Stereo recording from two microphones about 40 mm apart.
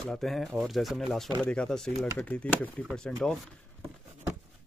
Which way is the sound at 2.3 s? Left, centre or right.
Left.